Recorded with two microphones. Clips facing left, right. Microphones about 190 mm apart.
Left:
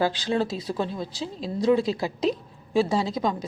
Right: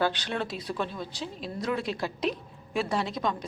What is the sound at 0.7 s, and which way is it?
A woman's voice, 30° left (ahead or behind).